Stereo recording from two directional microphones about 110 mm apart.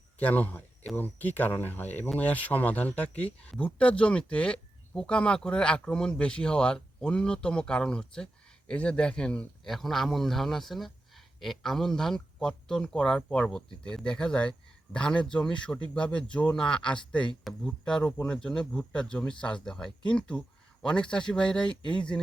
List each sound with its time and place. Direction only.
0.2 s speech: 15° left (ahead or behind)